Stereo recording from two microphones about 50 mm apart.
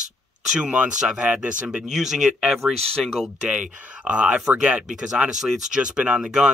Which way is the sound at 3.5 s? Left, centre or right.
Right.